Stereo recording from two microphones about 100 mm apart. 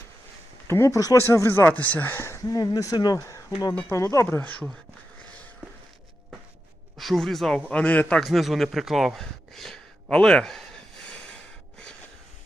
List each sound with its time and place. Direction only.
0.7 s speech: 30° left (ahead or behind)
6.9 s speech: centre (ahead or behind)
7.7 s a man's voice: 15° left (ahead or behind)
8.2 s speech: centre (ahead or behind)